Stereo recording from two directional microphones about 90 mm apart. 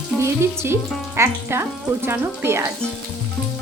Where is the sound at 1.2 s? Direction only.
25° right (ahead or behind).